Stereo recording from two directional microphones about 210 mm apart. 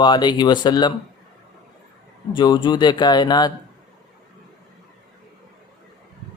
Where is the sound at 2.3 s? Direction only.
20° left (ahead or behind).